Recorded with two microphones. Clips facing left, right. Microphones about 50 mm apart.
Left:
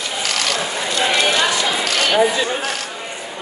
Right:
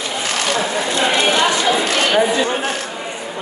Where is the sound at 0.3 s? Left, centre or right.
Right.